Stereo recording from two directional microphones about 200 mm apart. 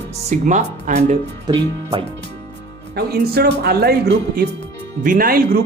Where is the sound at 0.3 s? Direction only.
40° right (ahead or behind).